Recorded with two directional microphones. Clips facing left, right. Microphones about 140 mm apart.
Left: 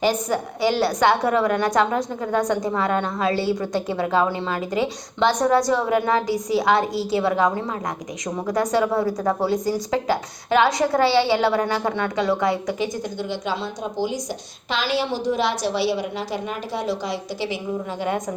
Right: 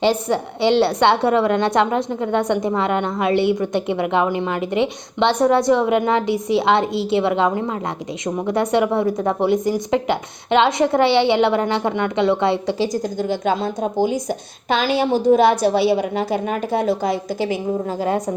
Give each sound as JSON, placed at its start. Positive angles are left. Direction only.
{"t": 0.0, "sound": "a woman's voice", "side_deg": -25}